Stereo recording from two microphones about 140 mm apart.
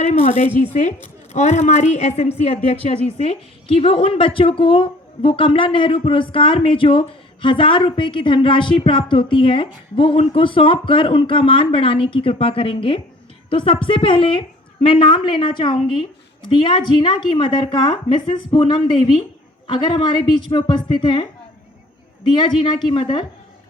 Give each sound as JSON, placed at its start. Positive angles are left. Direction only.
{"t": 0.0, "sound": "a woman's voice", "side_deg": 55}
{"t": 22.3, "sound": "speech", "side_deg": 35}